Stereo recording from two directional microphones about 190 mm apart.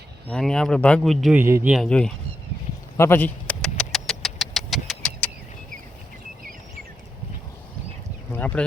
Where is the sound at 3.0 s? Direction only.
10° left (ahead or behind).